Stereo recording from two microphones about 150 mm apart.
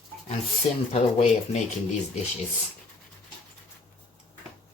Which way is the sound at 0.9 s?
45° left (ahead or behind).